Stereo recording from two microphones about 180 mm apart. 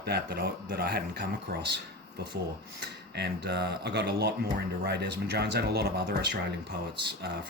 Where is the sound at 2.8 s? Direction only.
70° right (ahead or behind).